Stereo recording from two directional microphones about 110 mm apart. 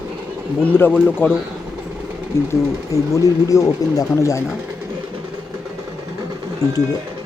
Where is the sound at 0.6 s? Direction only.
20° left (ahead or behind).